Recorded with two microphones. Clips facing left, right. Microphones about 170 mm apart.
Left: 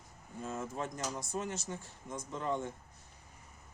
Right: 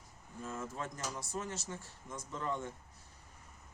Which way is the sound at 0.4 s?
20° left (ahead or behind).